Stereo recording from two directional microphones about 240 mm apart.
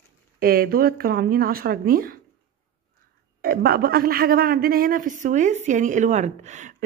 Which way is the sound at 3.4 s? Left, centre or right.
Right.